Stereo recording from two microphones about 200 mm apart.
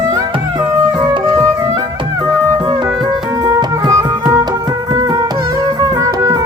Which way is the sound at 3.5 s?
15° right (ahead or behind).